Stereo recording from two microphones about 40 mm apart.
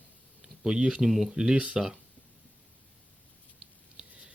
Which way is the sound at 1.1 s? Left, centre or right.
Centre.